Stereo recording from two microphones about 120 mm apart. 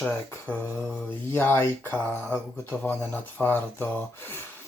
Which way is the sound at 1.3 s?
20° left (ahead or behind).